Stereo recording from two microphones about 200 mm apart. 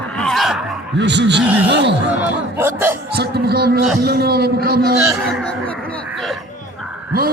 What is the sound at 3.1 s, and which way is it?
Speech, 55° right (ahead or behind).